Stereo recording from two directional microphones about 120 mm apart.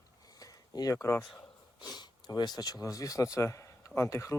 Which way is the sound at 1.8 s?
35° left (ahead or behind).